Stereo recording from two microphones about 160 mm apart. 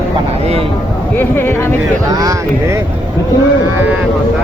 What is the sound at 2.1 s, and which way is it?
Speech, 20° right (ahead or behind).